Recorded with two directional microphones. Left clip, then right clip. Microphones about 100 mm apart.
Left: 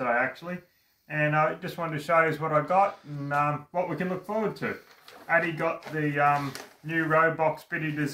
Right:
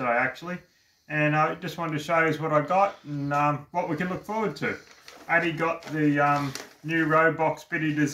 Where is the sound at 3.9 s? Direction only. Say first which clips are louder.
Right 1 dB; 5° left (ahead or behind).